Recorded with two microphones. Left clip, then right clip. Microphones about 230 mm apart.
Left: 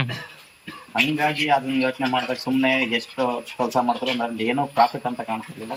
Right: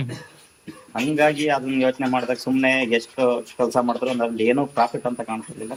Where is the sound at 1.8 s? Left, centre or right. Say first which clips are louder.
Right 1 dB; right.